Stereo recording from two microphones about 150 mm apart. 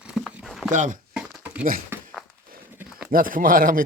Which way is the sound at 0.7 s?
55° right (ahead or behind).